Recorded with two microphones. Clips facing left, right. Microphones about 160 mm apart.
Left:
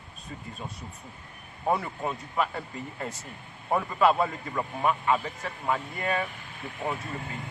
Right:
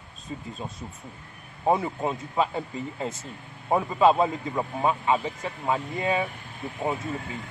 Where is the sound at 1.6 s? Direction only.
15° right (ahead or behind).